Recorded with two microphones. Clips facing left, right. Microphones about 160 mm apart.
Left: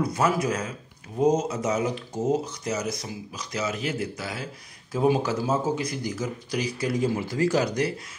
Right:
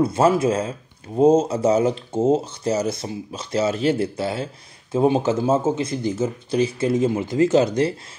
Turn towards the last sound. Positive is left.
turn(degrees=-25)  # may be behind; listen again after turning